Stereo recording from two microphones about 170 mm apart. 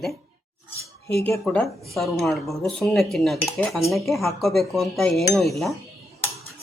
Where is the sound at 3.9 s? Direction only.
Centre (ahead or behind).